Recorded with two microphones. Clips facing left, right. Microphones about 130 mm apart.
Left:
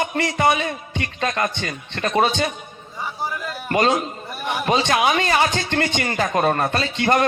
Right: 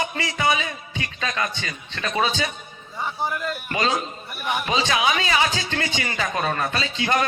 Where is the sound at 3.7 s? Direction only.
50° left (ahead or behind).